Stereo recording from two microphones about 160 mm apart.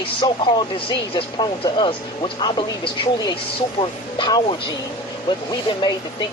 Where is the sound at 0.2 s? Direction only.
30° left (ahead or behind).